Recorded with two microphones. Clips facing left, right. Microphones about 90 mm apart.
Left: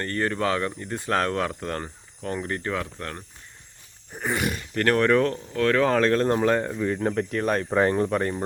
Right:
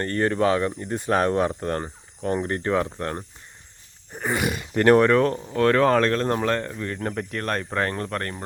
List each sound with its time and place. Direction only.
0.0 s speech: 25° right (ahead or behind)
4.1 s speech: 5° right (ahead or behind); by 5.0 s 20° right (ahead or behind)
5.0 s speech: 5° right (ahead or behind); by 8.4 s 10° left (ahead or behind)